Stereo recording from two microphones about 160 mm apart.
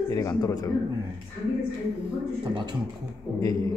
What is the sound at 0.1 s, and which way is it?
Speech, 25° left (ahead or behind).